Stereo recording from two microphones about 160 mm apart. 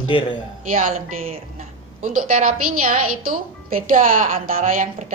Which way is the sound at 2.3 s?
55° right (ahead or behind).